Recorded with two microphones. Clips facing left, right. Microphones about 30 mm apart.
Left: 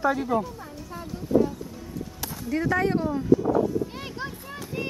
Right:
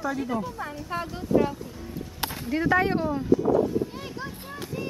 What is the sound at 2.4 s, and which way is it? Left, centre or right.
Speech, centre.